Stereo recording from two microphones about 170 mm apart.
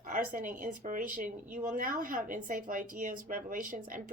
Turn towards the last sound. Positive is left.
turn(degrees=-55)  # may be behind; listen again after turning